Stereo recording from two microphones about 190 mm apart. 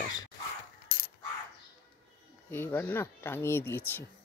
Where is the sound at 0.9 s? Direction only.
50° left (ahead or behind).